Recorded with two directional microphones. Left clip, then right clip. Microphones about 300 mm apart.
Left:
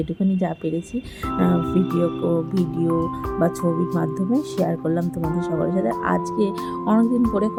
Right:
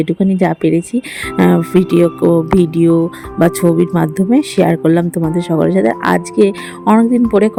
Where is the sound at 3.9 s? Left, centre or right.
Right.